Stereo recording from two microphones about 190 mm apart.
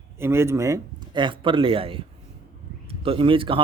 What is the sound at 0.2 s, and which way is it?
A man's voice, 15° right (ahead or behind).